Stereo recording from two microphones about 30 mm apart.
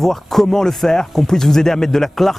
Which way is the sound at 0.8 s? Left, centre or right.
Left.